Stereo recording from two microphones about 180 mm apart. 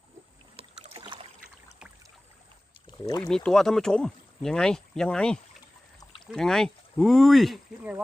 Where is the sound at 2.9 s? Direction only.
20° left (ahead or behind).